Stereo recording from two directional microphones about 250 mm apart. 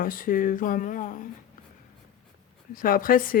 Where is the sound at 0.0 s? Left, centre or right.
Left.